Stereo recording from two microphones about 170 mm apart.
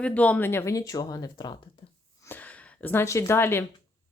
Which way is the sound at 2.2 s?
10° left (ahead or behind).